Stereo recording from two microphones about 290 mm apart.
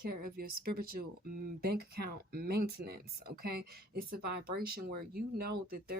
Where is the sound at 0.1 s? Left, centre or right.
Right.